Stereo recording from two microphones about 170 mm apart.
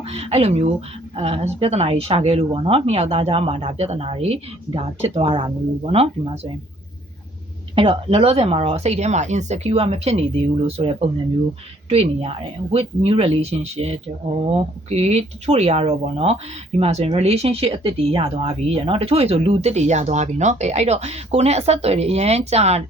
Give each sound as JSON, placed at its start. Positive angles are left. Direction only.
{"t": 0.1, "sound": "speech", "side_deg": -35}
{"t": 7.8, "sound": "speech", "side_deg": -35}